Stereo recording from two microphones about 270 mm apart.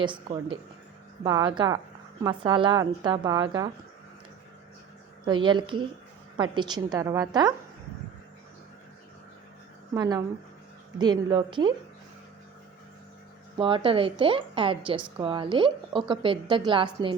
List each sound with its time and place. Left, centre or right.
0.0 s a woman's voice: centre
5.2 s a woman's voice: centre
9.9 s a woman's voice: centre
13.6 s a woman's voice: centre